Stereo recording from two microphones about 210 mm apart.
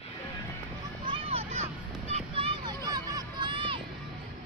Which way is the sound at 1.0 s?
25° right (ahead or behind).